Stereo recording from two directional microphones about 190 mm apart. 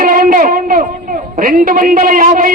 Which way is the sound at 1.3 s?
45° right (ahead or behind).